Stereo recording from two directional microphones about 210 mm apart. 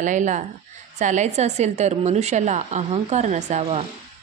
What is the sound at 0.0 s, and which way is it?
A woman's voice, 35° right (ahead or behind).